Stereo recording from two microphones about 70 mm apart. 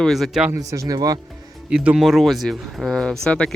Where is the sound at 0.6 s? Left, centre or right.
Right.